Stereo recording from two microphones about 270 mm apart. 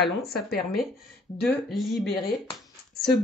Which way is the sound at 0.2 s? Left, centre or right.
Left.